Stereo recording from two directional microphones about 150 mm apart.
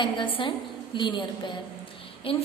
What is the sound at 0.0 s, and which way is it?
A woman's voice, 35° left (ahead or behind).